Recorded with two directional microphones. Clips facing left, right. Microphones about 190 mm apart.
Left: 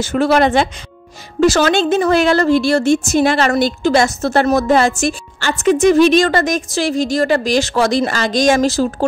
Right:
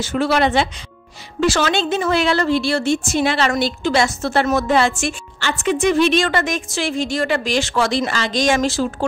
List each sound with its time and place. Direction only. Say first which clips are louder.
0.0 s a woman's voice: left 4 dB; 45° left (ahead or behind)